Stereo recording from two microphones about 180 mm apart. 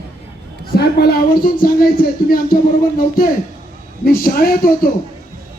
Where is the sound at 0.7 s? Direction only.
60° left (ahead or behind).